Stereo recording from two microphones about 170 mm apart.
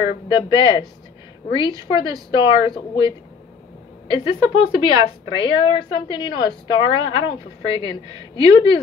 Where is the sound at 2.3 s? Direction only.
30° left (ahead or behind).